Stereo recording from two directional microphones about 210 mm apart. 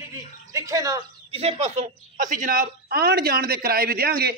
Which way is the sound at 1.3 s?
30° right (ahead or behind).